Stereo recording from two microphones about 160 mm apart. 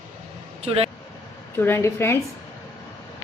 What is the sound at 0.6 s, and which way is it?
Speech, 40° right (ahead or behind).